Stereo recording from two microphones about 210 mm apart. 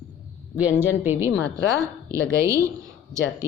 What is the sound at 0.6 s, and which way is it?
A woman's voice, 10° right (ahead or behind).